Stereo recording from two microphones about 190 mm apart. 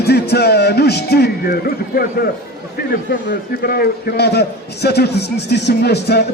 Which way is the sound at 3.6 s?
55° left (ahead or behind).